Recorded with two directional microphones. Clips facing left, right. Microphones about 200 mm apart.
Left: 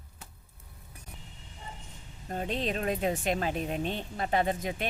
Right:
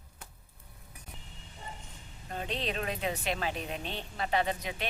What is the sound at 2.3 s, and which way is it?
Speech, 45° left (ahead or behind).